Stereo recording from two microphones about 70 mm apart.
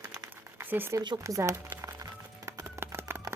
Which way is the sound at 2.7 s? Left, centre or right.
Right.